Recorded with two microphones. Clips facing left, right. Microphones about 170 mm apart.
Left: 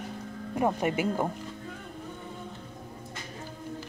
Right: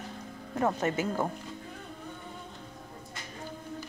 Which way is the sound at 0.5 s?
10° left (ahead or behind).